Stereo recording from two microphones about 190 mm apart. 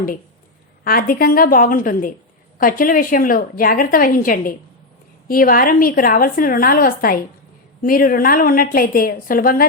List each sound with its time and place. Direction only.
0.9 s a woman's voice: 50° left (ahead or behind)